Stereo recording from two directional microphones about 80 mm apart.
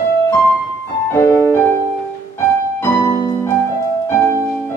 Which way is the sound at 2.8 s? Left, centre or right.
Left.